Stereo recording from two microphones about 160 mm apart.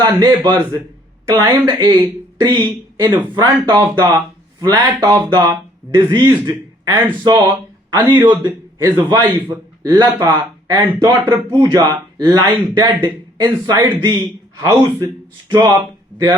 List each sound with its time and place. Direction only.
0.0 s speech: 25° right (ahead or behind)
8.8 s a man's voice: 15° right (ahead or behind)